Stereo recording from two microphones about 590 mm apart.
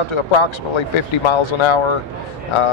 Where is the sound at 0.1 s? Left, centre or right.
Left.